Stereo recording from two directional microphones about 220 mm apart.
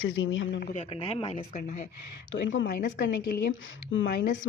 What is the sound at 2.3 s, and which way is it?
Speech, 60° left (ahead or behind).